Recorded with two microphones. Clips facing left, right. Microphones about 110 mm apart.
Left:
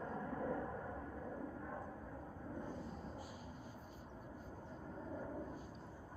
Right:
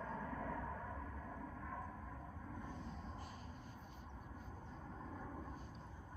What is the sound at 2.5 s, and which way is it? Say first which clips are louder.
Vehicle: left 4 dB; 10° left (ahead or behind).